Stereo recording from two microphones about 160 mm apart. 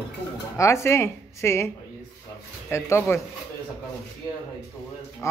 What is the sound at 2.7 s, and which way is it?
Speech, 15° left (ahead or behind).